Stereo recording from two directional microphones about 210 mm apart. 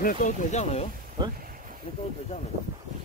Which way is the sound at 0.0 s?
35° left (ahead or behind).